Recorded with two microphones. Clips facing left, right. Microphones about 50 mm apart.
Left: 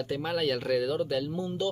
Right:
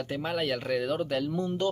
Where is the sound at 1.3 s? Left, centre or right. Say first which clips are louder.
Right 2 dB; right.